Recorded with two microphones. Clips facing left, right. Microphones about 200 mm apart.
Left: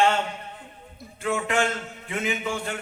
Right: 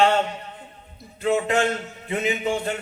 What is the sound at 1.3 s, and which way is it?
A man's voice, 25° right (ahead or behind).